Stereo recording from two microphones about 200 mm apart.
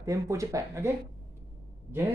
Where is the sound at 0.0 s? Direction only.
15° right (ahead or behind).